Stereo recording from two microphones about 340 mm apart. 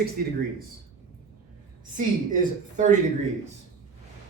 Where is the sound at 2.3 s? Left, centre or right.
Right.